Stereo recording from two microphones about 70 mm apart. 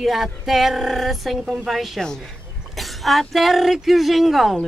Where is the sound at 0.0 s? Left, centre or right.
Centre.